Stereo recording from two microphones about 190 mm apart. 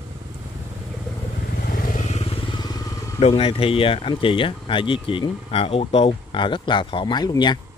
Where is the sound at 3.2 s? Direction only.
30° left (ahead or behind).